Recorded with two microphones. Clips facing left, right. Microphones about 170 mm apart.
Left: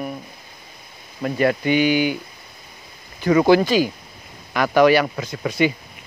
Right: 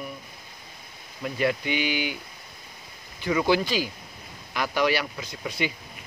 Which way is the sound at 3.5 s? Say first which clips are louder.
Left 8 dB; 50° left (ahead or behind).